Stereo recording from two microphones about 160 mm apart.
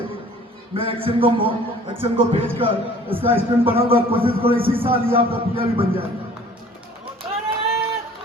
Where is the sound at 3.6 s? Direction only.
35° right (ahead or behind).